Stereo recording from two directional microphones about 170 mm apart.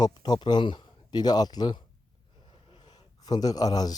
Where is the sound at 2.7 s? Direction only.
25° left (ahead or behind).